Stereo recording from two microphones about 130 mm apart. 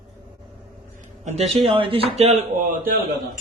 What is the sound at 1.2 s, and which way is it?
Speech, 60° right (ahead or behind).